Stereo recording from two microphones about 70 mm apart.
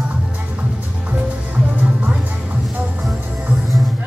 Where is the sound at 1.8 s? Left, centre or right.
Centre.